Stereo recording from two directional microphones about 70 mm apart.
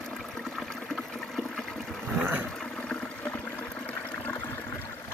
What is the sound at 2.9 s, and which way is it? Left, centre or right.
Toilet flush, left.